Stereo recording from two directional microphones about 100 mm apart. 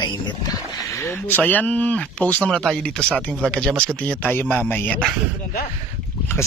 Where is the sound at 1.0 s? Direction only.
20° left (ahead or behind).